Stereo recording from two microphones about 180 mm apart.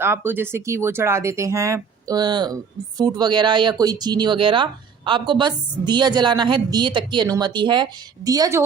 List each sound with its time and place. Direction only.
0.0 s speech: 15° right (ahead or behind)